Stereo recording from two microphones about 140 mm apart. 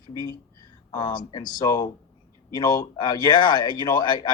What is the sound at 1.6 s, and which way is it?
Speech, 30° left (ahead or behind).